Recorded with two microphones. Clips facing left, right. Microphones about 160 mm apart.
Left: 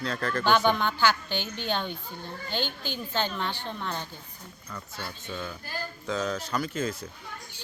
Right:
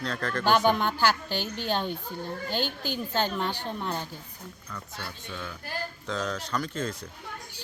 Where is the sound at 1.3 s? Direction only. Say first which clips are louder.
Right 1 dB; 40° right (ahead or behind).